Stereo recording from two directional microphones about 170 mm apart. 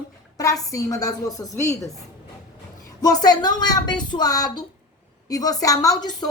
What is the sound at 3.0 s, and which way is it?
A woman's voice, 25° left (ahead or behind).